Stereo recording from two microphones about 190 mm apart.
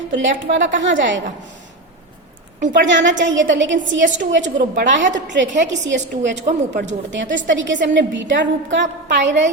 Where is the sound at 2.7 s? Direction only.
70° right (ahead or behind).